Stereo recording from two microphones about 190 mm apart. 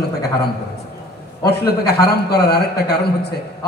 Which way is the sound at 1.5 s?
60° left (ahead or behind).